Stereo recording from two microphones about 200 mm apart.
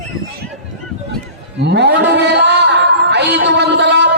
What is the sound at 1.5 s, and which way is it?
Music, 60° right (ahead or behind).